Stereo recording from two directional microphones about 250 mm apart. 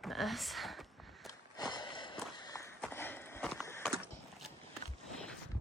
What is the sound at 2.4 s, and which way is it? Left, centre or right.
Walk, centre.